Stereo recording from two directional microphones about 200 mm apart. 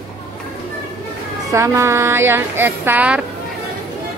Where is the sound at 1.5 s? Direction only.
15° right (ahead or behind).